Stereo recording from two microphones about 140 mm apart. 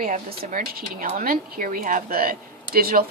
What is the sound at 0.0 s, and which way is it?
A woman's voice, 85° right.